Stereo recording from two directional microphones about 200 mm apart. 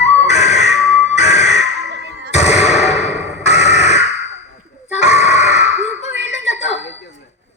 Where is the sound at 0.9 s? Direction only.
35° left (ahead or behind).